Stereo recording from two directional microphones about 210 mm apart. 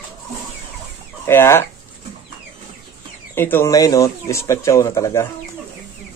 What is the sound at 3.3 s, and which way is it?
Speech, 10° left (ahead or behind).